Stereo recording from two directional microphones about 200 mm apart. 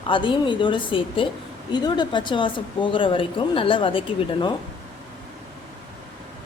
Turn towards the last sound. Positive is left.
turn(degrees=25)  # may be behind; listen again after turning